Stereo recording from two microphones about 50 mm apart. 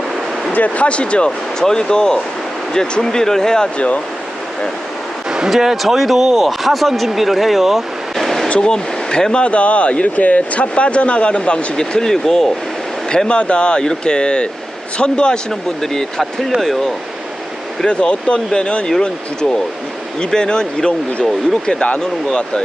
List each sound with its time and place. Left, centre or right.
0.5 s speech: left
5.5 s speech: centre
8.4 s speech: centre
17.8 s speech: centre
22.3 s speech: centre